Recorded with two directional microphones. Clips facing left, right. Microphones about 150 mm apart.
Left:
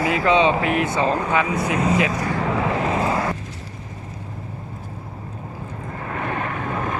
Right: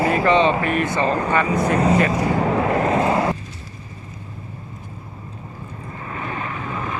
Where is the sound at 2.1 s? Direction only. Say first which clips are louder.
Right 4 dB; 35° right (ahead or behind).